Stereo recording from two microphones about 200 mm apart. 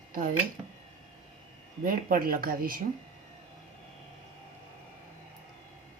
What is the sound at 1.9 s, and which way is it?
Speech, 45° right (ahead or behind).